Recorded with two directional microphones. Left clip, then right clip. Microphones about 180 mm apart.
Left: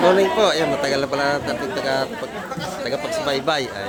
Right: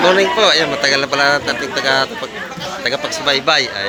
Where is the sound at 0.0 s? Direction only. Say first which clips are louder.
Right 4 dB; 15° left (ahead or behind).